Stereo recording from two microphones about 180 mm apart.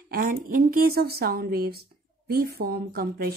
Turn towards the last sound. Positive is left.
turn(degrees=-55)  # may be behind; listen again after turning